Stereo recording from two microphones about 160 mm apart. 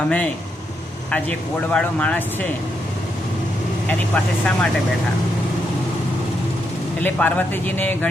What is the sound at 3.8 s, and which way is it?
Speech, 10° left (ahead or behind).